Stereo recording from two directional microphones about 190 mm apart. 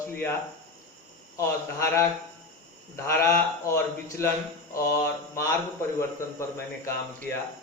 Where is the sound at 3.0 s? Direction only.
15° left (ahead or behind).